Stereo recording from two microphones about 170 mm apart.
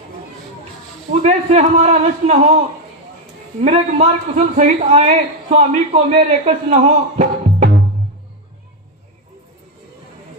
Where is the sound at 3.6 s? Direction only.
40° right (ahead or behind).